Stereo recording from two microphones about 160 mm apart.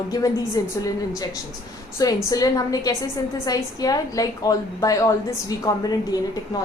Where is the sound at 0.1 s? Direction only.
20° left (ahead or behind).